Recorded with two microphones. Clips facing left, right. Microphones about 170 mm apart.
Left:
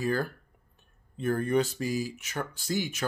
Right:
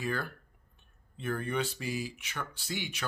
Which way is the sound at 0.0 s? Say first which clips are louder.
Left 6 dB; 40° left (ahead or behind).